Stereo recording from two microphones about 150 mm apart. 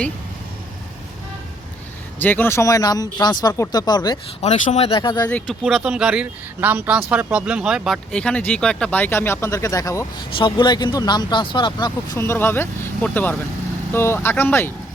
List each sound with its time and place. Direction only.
2.1 s speech: 15° left (ahead or behind)
4.4 s speech: 50° left (ahead or behind); by 5.3 s 30° left (ahead or behind)
5.6 s speech: 5° right (ahead or behind)
8.1 s speech: 5° left (ahead or behind)
10.2 s speech: 30° left (ahead or behind)
12.1 s speech: 15° left (ahead or behind)